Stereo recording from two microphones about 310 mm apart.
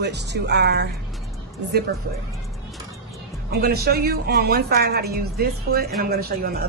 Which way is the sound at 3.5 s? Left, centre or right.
Right.